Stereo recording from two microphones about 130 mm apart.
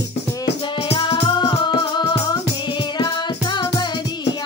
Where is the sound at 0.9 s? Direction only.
40° left (ahead or behind).